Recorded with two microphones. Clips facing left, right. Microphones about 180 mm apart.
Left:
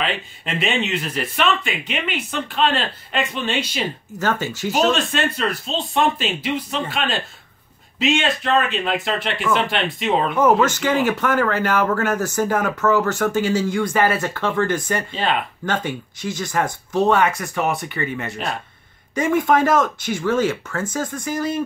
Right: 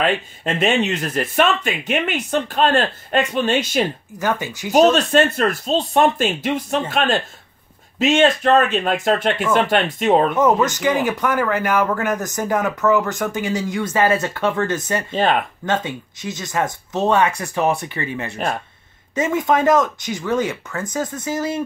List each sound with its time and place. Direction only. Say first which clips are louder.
0.0 s speech: right 5 dB; 45° right (ahead or behind)
4.2 s speech: even; 15° right (ahead or behind)
5.1 s speech: right 6 dB; 45° right (ahead or behind)
10.4 s speech: even; 15° right (ahead or behind)